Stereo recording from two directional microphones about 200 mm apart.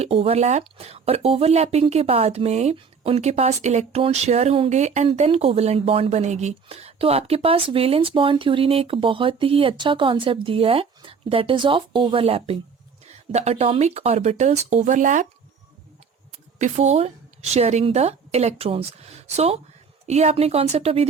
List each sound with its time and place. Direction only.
0.0 s speech: 30° right (ahead or behind)
16.6 s a woman's voice: 35° right (ahead or behind)